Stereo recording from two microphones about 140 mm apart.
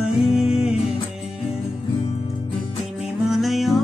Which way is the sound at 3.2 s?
Centre (ahead or behind).